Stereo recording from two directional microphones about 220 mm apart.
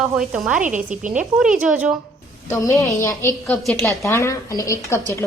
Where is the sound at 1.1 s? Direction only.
5° right (ahead or behind).